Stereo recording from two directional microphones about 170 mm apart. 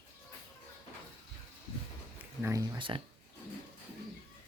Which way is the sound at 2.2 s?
15° right (ahead or behind).